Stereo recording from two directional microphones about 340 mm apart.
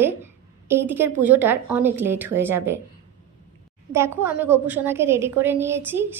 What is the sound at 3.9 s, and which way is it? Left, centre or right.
A woman's voice, centre.